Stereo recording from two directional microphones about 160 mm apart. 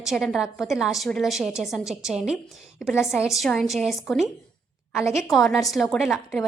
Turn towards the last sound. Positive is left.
turn(degrees=0)  # may be behind; listen again after turning